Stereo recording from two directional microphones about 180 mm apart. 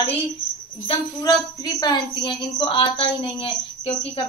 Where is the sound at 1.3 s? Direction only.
20° left (ahead or behind).